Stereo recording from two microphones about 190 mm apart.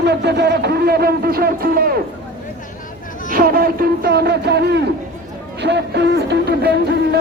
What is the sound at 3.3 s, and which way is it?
A man's voice, 50° right (ahead or behind).